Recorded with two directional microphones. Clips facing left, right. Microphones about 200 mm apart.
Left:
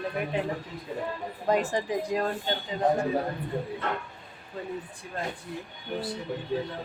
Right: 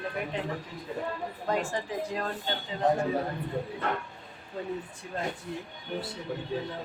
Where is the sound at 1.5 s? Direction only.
20° left (ahead or behind).